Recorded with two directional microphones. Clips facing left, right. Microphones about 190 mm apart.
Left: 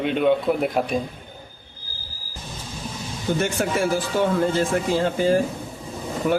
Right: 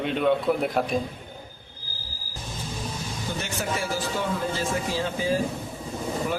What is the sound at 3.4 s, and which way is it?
A man's voice, 55° left (ahead or behind).